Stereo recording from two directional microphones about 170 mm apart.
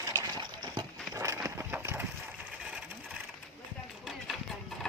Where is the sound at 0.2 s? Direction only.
25° right (ahead or behind); by 4.9 s centre (ahead or behind).